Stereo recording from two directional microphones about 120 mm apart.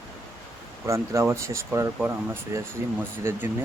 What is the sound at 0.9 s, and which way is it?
Speech, 25° right (ahead or behind).